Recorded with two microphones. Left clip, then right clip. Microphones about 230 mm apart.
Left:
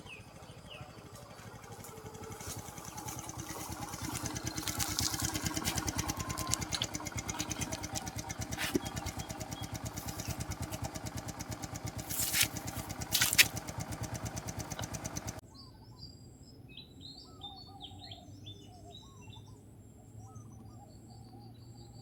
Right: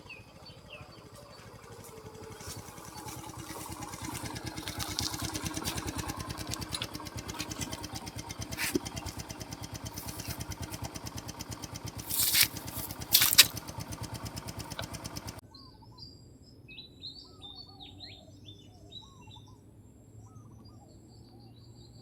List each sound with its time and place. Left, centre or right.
0.1 s a sound: centre
4.6 s vehicle: centre
5.3 s a sound: centre
6.6 s engine: centre
8.5 s engine: centre
8.8 s vehicle: centre
12.5 s a sound: centre
13.1 s patter: right
13.7 s engine: centre
14.6 s engine: centre